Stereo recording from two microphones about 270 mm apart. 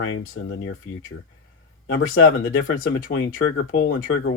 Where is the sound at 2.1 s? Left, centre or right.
Left.